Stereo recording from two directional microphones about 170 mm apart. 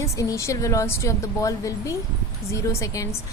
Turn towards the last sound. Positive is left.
turn(degrees=20)  # may be behind; listen again after turning